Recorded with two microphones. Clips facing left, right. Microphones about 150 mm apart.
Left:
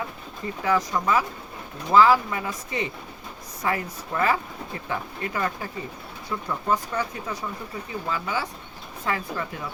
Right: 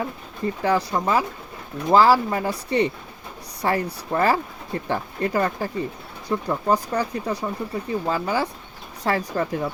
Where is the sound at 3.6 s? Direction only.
35° right (ahead or behind).